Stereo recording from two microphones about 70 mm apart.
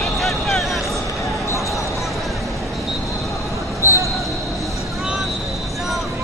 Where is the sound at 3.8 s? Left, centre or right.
Left.